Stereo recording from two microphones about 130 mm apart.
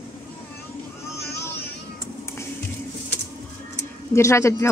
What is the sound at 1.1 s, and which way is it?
Vehicle, 20° left (ahead or behind).